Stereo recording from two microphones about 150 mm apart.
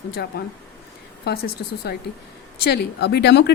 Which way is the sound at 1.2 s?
90° left.